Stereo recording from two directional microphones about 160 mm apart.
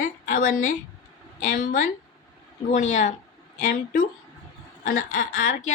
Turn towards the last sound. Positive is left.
turn(degrees=55)  # may be behind; listen again after turning